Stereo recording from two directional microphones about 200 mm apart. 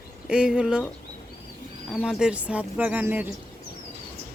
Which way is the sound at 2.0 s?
5° right (ahead or behind).